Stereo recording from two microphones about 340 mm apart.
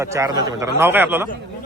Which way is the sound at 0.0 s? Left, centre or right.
Centre.